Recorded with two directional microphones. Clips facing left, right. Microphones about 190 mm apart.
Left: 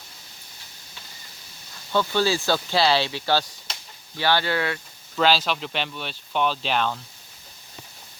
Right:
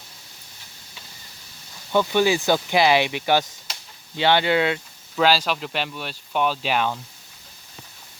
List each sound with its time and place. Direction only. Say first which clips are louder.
1.9 s speech: right 3 dB; 15° right (ahead or behind)
5.1 s speech: right 1 dB; 10° right (ahead or behind)